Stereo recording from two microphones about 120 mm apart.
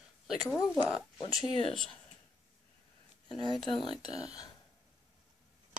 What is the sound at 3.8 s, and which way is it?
Speech, 40° left (ahead or behind).